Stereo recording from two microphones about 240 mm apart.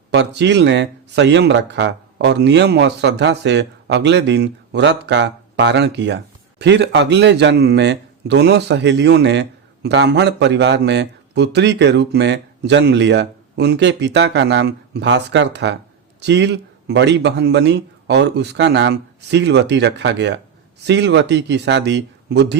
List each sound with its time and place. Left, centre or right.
0.1 s a man's voice: right